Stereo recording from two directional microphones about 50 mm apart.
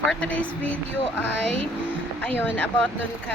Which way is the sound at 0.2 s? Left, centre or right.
Left.